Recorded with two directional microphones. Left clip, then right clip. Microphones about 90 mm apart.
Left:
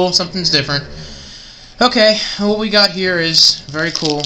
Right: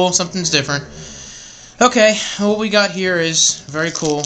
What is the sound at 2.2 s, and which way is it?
Speech, 45° right (ahead or behind).